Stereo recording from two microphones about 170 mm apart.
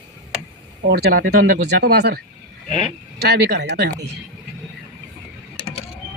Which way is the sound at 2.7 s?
Centre (ahead or behind).